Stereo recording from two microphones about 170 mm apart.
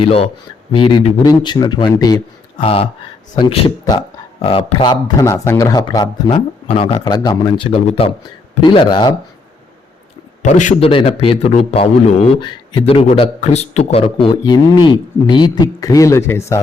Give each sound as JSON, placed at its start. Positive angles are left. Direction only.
{"t": 0.0, "sound": "a man's voice", "side_deg": 35}
{"t": 2.6, "sound": "a man's voice", "side_deg": 35}
{"t": 7.7, "sound": "a man's voice", "side_deg": 35}
{"t": 8.6, "sound": "speech", "side_deg": 25}
{"t": 10.4, "sound": "a man's voice", "side_deg": 45}